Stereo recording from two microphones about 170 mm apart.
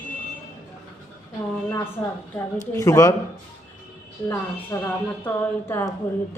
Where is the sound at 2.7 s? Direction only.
20° left (ahead or behind).